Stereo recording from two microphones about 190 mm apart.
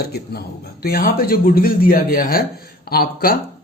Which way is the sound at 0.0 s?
55° left (ahead or behind).